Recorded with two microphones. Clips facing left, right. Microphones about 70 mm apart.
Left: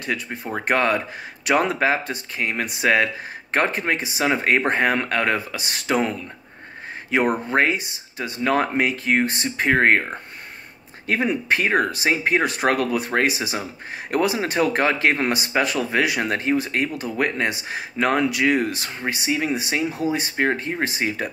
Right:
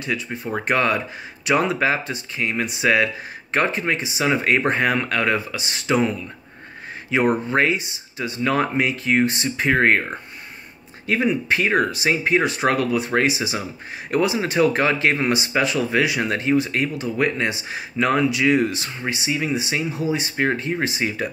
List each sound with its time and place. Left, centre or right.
0.0 s speech: left
11.1 s speech: left